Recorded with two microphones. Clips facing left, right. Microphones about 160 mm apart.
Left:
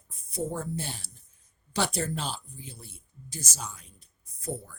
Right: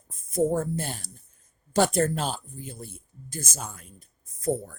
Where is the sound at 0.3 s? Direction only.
50° right (ahead or behind).